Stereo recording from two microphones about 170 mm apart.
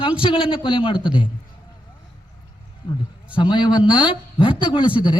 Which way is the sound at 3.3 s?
30° left (ahead or behind).